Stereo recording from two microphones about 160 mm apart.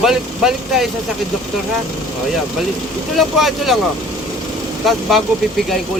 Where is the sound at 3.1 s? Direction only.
Centre (ahead or behind).